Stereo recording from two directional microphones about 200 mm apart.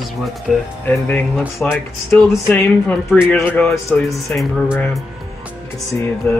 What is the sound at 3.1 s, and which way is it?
Speech, 5° right (ahead or behind).